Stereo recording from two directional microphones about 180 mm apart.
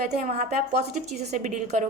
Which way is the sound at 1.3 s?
40° right (ahead or behind).